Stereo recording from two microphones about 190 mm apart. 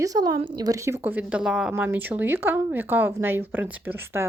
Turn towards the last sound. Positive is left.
turn(degrees=-10)  # may be behind; listen again after turning